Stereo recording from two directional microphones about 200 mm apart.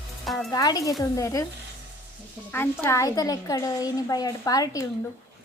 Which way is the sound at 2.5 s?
10° left (ahead or behind).